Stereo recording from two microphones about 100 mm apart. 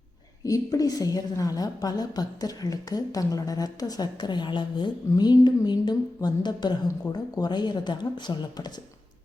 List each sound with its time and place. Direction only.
0.4 s a woman's voice: 35° left (ahead or behind)